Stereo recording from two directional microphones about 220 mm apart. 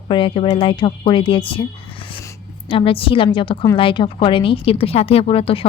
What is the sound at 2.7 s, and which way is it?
A woman's voice, 25° left (ahead or behind).